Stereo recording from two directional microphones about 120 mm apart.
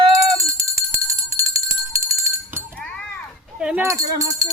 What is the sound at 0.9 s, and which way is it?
Music, 25° right (ahead or behind).